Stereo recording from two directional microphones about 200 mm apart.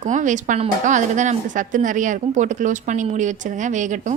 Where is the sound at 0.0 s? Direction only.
40° right (ahead or behind).